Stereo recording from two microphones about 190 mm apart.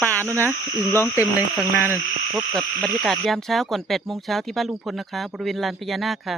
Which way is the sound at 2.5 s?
Centre (ahead or behind).